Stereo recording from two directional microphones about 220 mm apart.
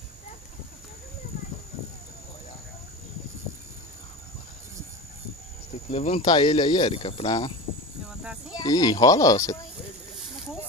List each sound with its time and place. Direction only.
5.9 s speech: 30° left (ahead or behind)
8.2 s livestock: 5° right (ahead or behind)
8.5 s speech: 15° left (ahead or behind)